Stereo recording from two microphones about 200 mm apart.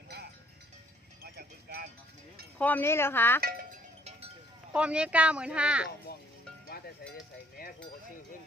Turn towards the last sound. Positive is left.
turn(degrees=45)  # may be behind; listen again after turning